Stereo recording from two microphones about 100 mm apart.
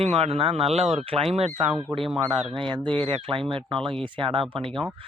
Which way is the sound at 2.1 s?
65° right (ahead or behind).